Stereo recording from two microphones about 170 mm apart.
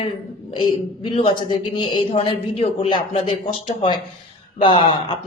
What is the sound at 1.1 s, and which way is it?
Speech, 30° left (ahead or behind).